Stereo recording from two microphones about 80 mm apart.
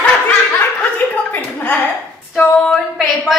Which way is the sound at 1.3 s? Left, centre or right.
Left.